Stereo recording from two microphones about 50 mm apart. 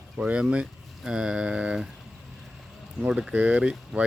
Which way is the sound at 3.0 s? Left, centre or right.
Centre.